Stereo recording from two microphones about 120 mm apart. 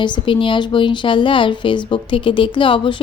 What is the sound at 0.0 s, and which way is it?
Speech, 40° left (ahead or behind).